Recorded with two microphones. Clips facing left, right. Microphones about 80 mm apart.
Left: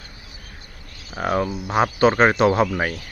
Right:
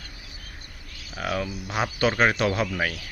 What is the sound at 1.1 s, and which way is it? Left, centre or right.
Speech, left.